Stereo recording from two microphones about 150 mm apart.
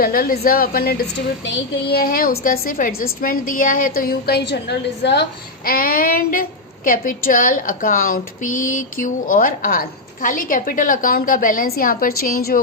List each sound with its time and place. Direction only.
0.0 s a woman's voice: 75° left (ahead or behind)
5.6 s a woman's voice: 75° left (ahead or behind)